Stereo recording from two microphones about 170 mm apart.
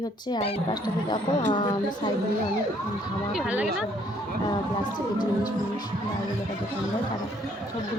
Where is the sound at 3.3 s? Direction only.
5° right (ahead or behind).